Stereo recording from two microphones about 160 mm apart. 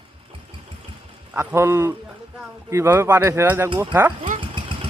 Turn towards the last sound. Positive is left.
turn(degrees=-10)  # may be behind; listen again after turning